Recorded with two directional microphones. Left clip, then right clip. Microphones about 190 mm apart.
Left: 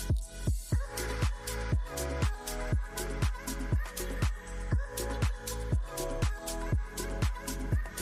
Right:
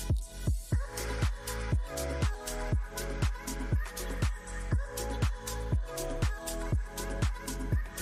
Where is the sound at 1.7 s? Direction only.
Centre (ahead or behind).